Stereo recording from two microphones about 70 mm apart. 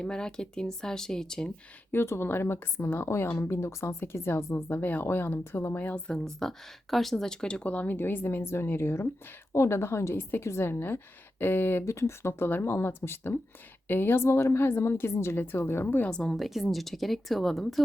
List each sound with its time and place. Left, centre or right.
0.0 s speech: centre
1.9 s a woman's voice: left
6.1 s a woman's voice: centre; by 11.9 s left
11.9 s a woman's voice: left
16.0 s speech: centre
16.4 s a woman's voice: centre